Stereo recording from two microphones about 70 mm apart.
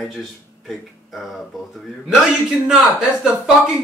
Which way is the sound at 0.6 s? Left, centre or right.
Centre.